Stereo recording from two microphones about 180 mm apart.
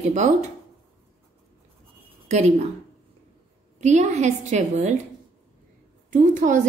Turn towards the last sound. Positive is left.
turn(degrees=-45)  # may be behind; listen again after turning